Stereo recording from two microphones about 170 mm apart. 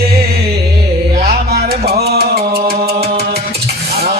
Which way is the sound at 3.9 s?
40° right (ahead or behind).